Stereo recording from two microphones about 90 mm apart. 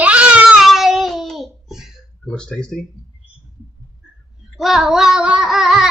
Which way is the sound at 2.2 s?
10° left (ahead or behind).